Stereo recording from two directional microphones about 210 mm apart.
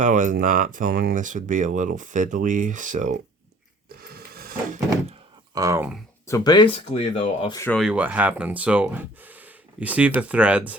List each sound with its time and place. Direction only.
0.0 s speech: 35° right (ahead or behind)
3.8 s a sound: 45° right (ahead or behind)
5.5 s speech: 15° right (ahead or behind)
6.2 s speech: 15° left (ahead or behind)
7.6 s speech: 5° left (ahead or behind)
7.9 s speech: 5° right (ahead or behind)